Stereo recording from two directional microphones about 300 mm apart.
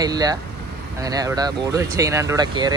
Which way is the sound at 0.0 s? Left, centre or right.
Centre.